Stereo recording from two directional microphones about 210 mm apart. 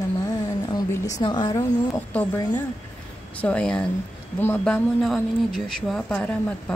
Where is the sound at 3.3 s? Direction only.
5° left (ahead or behind).